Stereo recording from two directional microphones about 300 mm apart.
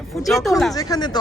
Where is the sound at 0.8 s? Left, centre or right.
Centre.